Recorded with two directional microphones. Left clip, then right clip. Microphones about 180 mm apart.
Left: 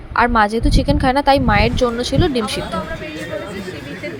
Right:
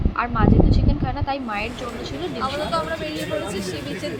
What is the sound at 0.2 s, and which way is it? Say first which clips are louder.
A woman's voice: left 7 dB; 55° left (ahead or behind).